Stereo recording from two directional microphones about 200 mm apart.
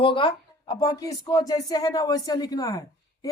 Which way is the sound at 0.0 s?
25° left (ahead or behind).